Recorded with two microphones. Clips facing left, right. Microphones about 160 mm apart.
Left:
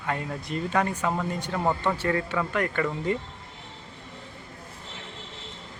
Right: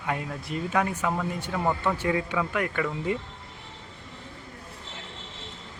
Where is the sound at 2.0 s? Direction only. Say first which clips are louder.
Even; 10° right (ahead or behind).